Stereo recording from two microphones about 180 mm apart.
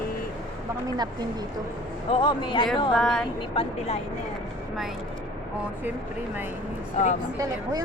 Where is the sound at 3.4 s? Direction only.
30° left (ahead or behind).